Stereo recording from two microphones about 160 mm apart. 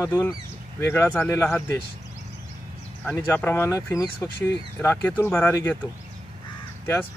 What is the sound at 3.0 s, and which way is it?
Speech, 10° left (ahead or behind).